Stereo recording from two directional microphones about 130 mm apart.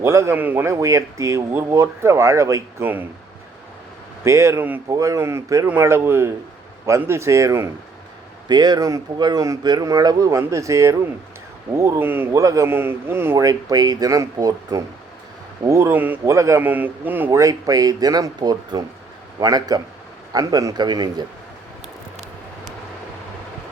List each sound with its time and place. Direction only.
0.0 s a man's voice: 20° right (ahead or behind)
4.2 s a man's voice: 20° right (ahead or behind)
8.4 s a man's voice: 35° right (ahead or behind)